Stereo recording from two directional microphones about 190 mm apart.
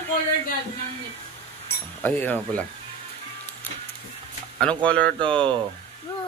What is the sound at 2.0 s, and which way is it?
Speech, 10° left (ahead or behind).